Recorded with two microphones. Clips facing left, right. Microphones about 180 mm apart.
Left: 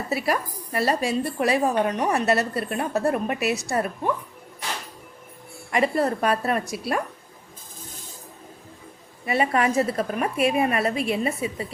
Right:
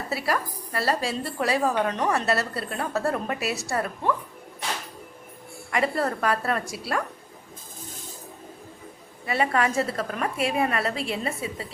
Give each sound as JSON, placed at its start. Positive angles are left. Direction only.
{"t": 0.1, "sound": "a woman's voice", "side_deg": 20}
{"t": 5.7, "sound": "a woman's voice", "side_deg": 20}
{"t": 9.2, "sound": "a woman's voice", "side_deg": 20}